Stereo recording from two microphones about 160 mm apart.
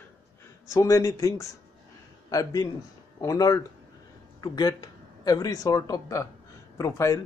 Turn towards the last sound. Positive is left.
turn(degrees=20)  # may be behind; listen again after turning